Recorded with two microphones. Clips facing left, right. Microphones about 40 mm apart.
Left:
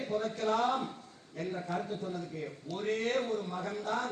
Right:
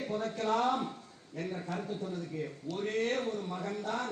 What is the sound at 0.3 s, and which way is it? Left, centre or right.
Speech, right.